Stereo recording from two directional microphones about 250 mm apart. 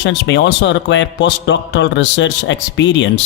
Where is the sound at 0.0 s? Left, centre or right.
Left.